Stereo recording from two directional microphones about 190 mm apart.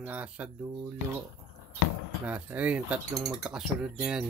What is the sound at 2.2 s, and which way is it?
Speech, 10° right (ahead or behind).